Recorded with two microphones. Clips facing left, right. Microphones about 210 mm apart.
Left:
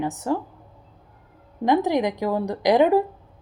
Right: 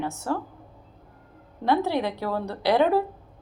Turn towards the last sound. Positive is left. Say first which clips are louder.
# left 4 dB
turn(degrees=15)  # may be behind; listen again after turning